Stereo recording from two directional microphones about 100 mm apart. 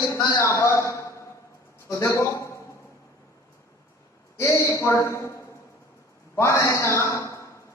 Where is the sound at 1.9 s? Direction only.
30° left (ahead or behind).